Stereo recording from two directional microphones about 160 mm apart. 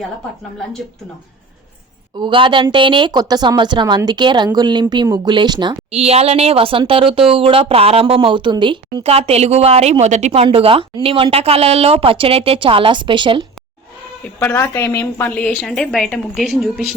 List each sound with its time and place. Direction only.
2.1 s a woman's voice: 30° right (ahead or behind)
14.3 s a woman's voice: 15° left (ahead or behind); by 16.8 s centre (ahead or behind)